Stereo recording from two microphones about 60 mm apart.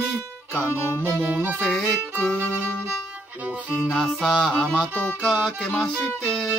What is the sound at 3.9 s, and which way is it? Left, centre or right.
Music, centre.